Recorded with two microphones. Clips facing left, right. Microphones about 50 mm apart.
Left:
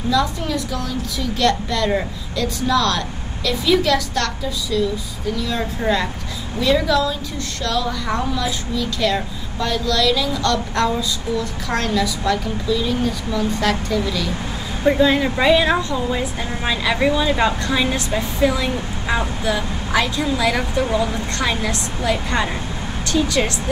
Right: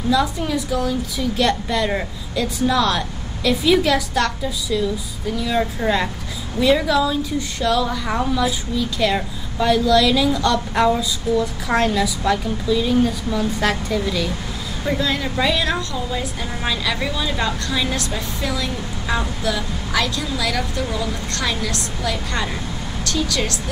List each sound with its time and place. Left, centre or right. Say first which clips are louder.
0.1 s a woman's voice: right 1 dB; centre
14.8 s speech: left 7 dB; left